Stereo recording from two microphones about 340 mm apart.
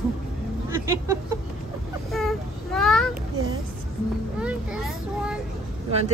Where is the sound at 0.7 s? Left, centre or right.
Centre.